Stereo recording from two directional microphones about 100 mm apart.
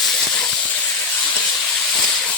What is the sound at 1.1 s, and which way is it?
Hiss, 5° left (ahead or behind).